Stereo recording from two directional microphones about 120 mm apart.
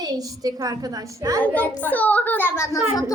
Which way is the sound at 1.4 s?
15° left (ahead or behind).